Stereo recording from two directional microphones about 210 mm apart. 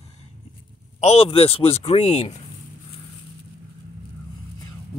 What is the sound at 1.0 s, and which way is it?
Speech, 25° left (ahead or behind).